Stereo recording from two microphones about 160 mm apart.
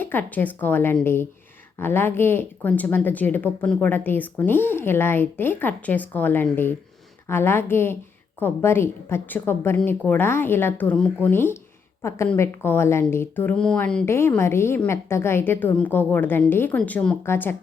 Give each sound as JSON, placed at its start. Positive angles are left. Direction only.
{"t": 0.0, "sound": "a woman's voice", "side_deg": 10}